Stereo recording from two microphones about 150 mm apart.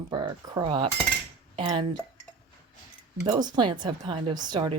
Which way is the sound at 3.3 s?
30° right (ahead or behind).